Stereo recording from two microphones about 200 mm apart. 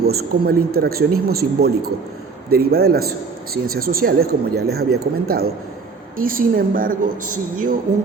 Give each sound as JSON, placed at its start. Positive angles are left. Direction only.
{"t": 0.1, "sound": "a woman's voice", "side_deg": -50}